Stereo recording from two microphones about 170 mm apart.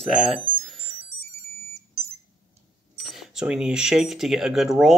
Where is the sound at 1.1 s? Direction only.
20° left (ahead or behind).